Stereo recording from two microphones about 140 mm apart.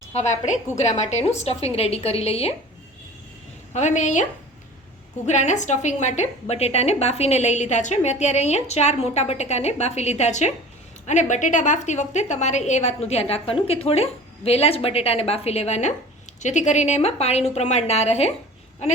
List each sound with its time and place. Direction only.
0.1 s a woman's voice: 55° left (ahead or behind)
3.7 s a woman's voice: 55° left (ahead or behind)